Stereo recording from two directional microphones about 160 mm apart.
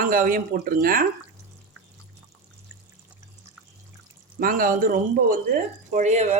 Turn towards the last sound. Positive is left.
turn(degrees=-45)  # may be behind; listen again after turning